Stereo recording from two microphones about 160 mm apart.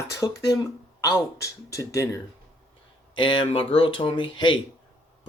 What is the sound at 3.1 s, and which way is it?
Speech, 30° left (ahead or behind).